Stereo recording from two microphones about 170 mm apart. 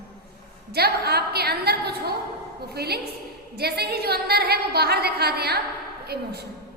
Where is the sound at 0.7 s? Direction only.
70° right (ahead or behind).